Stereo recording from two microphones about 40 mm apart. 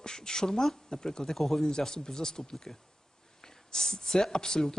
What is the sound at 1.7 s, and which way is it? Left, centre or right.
Speech, centre.